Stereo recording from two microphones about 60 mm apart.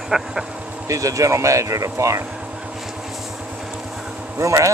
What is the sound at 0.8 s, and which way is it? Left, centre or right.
Speech, right.